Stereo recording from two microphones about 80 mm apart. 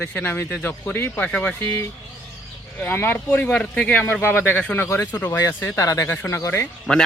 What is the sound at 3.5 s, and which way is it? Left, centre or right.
Speech, centre.